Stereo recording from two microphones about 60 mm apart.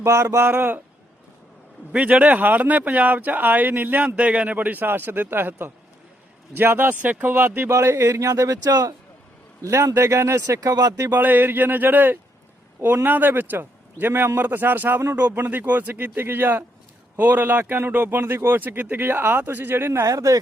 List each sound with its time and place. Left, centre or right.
0.0 s a sound: right
0.4 s a man's voice: right
1.9 s a man's voice: right
7.7 s speech: right
9.6 s speech: right
11.1 s a man's voice: right
20.1 s speech: right